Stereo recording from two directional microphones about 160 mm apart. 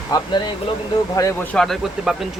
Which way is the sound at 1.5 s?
Centre (ahead or behind).